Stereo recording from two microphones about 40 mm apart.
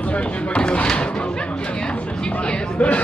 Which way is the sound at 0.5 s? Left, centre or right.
Left.